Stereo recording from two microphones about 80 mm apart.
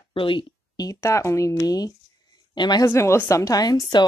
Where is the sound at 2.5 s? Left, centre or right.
Left.